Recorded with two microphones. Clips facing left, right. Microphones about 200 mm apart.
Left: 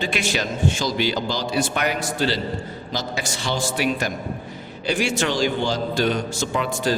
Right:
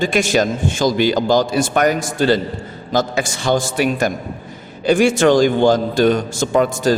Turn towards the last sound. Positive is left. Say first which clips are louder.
# right 7 dB
turn(degrees=-45)  # may be behind; listen again after turning